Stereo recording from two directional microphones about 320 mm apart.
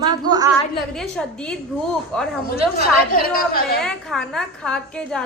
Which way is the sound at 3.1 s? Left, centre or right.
Left.